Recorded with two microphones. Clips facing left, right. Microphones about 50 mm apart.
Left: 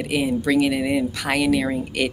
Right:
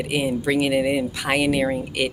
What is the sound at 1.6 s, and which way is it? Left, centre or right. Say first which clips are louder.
Speech: even; centre.